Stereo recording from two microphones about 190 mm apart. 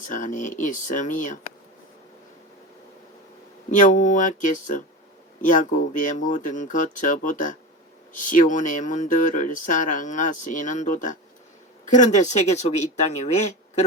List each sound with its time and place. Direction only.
0.1 s speech: 45° left (ahead or behind)
3.7 s speech: 40° left (ahead or behind)